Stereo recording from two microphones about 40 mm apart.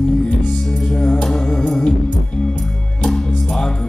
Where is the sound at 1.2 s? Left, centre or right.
Left.